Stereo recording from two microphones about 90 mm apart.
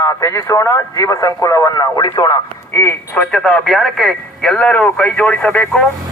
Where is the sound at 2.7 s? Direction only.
30° left (ahead or behind).